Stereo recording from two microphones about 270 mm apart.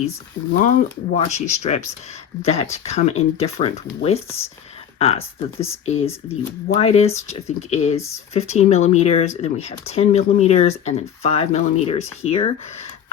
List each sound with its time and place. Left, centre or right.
0.6 s speech: left
5.5 s speech: centre
5.8 s speech: left